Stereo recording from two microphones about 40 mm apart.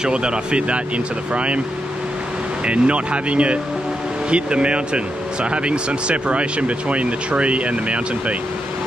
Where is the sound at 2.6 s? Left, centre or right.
Right.